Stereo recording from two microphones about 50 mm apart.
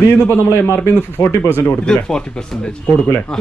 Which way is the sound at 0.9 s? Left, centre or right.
Left.